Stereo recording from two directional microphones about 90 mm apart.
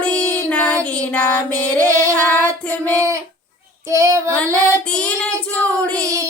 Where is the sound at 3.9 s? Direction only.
35° right (ahead or behind).